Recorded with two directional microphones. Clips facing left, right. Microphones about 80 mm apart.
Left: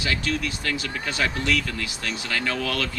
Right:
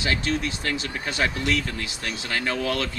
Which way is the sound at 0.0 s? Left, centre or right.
Right.